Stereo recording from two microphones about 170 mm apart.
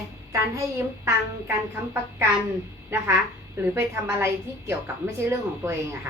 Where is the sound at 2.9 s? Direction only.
15° right (ahead or behind).